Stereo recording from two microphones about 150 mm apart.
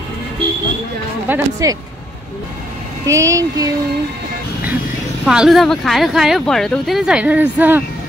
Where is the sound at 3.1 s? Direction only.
20° right (ahead or behind).